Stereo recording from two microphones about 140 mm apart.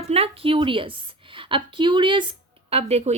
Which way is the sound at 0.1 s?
40° right (ahead or behind).